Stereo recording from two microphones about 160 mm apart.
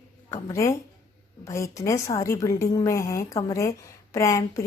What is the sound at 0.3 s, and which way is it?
A woman's voice, 20° left (ahead or behind).